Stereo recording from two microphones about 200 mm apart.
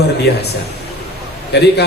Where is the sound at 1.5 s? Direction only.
55° left (ahead or behind).